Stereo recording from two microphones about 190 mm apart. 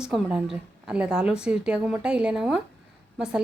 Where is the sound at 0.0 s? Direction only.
5° right (ahead or behind).